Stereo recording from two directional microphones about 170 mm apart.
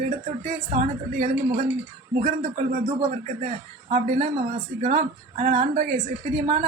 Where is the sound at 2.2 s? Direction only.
60° right (ahead or behind).